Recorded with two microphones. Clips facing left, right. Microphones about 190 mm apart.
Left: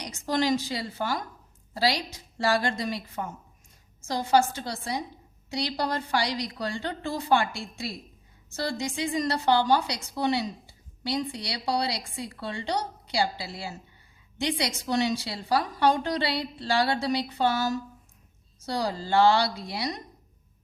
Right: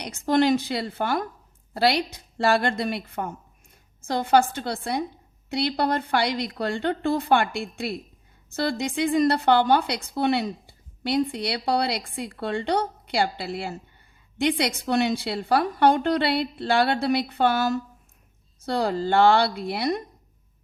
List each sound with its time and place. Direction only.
0.0 s speech: 60° right (ahead or behind)